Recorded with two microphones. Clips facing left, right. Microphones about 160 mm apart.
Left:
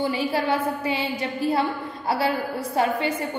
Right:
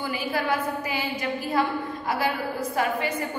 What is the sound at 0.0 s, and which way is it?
A woman's voice, 30° left (ahead or behind).